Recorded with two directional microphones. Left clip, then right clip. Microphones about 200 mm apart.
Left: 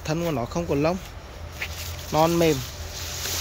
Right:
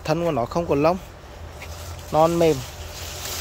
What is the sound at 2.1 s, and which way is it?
Speech, centre (ahead or behind).